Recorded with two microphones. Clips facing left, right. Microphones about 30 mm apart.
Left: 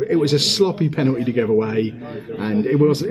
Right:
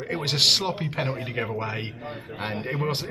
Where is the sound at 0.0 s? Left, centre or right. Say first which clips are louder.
Left 6 dB; centre.